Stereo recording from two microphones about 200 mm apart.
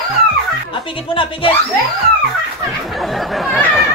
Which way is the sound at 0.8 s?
25° left (ahead or behind).